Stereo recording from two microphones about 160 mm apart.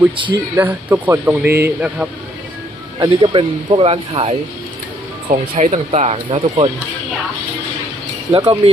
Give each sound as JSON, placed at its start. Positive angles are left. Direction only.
{"t": 0.5, "sound": "speech", "side_deg": -10}
{"t": 3.0, "sound": "speech", "side_deg": -30}
{"t": 5.3, "sound": "speech", "side_deg": -45}
{"t": 8.3, "sound": "speech", "side_deg": -20}